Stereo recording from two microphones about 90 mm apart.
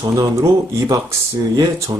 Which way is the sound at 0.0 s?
35° right (ahead or behind).